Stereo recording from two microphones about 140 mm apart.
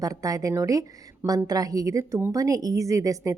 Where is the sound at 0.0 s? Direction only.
25° right (ahead or behind).